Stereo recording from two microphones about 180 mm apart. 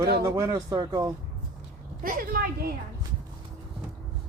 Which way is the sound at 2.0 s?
55° right (ahead or behind).